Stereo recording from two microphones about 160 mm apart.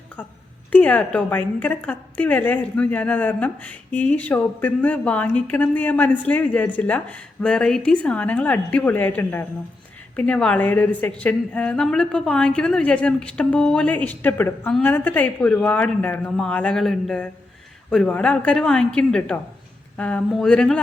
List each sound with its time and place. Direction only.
0.7 s a woman's voice: 10° left (ahead or behind)